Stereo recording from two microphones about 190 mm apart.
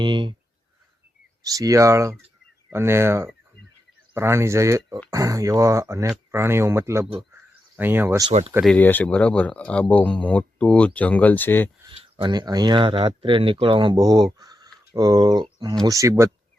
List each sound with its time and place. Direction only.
0.0 s speech: 25° right (ahead or behind)
1.5 s speech: 20° right (ahead or behind)
8.3 s speech: 35° right (ahead or behind)
8.6 s speech: 10° left (ahead or behind)
11.9 s speech: 30° right (ahead or behind)